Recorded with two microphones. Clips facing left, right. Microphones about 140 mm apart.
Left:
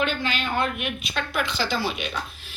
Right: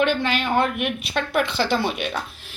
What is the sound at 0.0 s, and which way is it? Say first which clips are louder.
A child's voice: right 5 dB; 65° right (ahead or behind).